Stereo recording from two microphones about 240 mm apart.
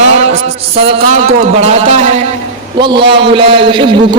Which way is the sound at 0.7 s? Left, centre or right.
Right.